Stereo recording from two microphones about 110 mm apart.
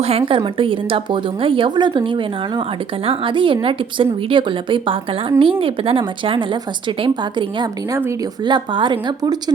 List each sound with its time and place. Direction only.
0.0 s speech: 60° right (ahead or behind); by 9.4 s 40° right (ahead or behind)